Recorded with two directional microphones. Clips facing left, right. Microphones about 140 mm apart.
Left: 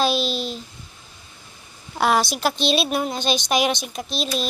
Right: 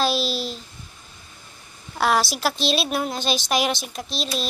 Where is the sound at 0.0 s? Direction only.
Centre (ahead or behind).